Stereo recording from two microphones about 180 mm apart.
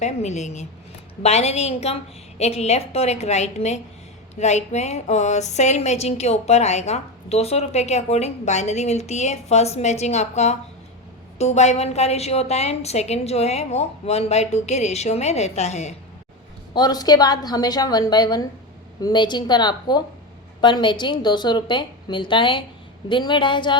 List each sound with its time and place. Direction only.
0.0 s a woman's voice: 40° left (ahead or behind)
16.7 s a woman's voice: 20° left (ahead or behind)